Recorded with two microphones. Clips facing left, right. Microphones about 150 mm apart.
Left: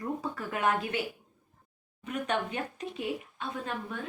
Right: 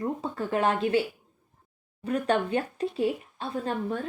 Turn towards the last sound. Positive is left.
turn(degrees=-30)  # may be behind; listen again after turning